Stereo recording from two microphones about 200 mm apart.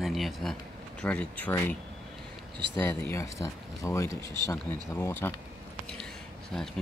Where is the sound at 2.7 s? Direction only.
15° left (ahead or behind).